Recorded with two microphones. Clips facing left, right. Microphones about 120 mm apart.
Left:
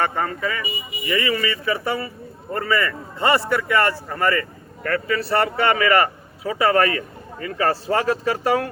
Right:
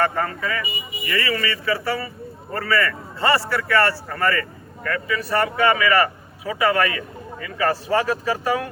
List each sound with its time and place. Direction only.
0.0 s a man's voice: 20° left (ahead or behind)
4.8 s a man's voice: 40° left (ahead or behind)